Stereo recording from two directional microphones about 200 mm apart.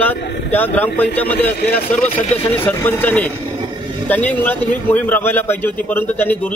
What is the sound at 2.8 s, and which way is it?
A man's voice, 10° left (ahead or behind).